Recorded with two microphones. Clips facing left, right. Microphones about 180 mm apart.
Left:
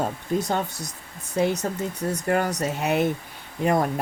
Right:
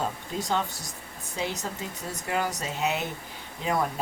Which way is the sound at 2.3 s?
55° left (ahead or behind).